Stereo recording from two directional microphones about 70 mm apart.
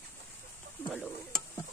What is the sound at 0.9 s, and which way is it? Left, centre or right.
Speech, centre.